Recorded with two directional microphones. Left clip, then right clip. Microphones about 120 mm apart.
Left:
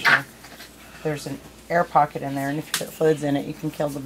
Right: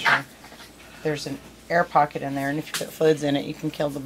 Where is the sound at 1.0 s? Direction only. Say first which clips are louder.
Right 1 dB; 15° right (ahead or behind).